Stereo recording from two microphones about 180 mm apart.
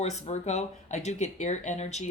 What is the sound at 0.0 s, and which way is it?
Speech, 40° left (ahead or behind).